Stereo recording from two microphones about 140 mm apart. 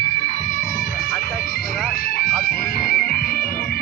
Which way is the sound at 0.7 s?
90° left.